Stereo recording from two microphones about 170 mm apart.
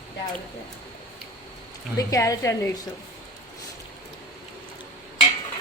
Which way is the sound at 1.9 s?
20° left (ahead or behind).